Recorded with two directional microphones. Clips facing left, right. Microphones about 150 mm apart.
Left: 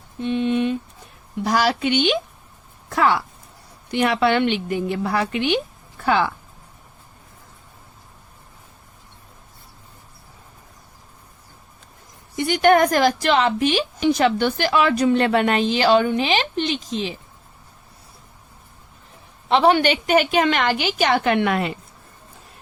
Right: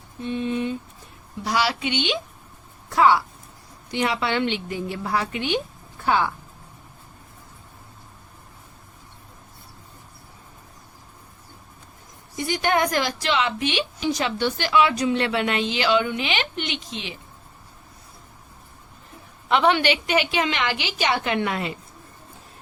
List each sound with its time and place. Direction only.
0.2 s speech: 85° left
1.5 s a woman's voice: 45° left (ahead or behind)
2.9 s a woman's voice: 60° left (ahead or behind)
12.4 s a woman's voice: 65° left (ahead or behind); by 17.2 s 40° left (ahead or behind)
19.5 s a woman's voice: 35° left (ahead or behind); by 21.3 s 50° left (ahead or behind)
21.3 s a woman's voice: 65° left (ahead or behind)